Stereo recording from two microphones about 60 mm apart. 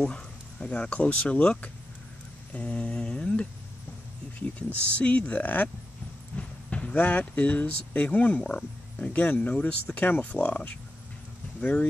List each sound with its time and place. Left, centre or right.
0.1 s speech: left
2.5 s a sound: centre
4.9 s speech: left
10.0 s speech: left